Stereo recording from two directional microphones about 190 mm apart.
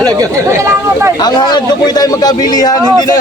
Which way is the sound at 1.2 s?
20° left (ahead or behind).